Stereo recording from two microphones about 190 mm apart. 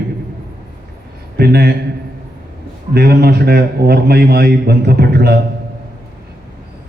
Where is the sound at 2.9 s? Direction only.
55° right (ahead or behind).